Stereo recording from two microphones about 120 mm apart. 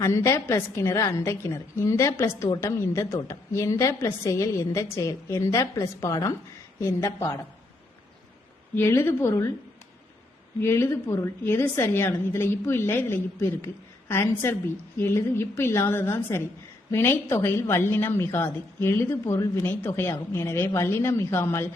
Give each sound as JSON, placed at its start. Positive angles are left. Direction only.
{"t": 0.0, "sound": "a woman's voice", "side_deg": 25}
{"t": 8.7, "sound": "a woman's voice", "side_deg": 20}
{"t": 10.6, "sound": "a woman's voice", "side_deg": 20}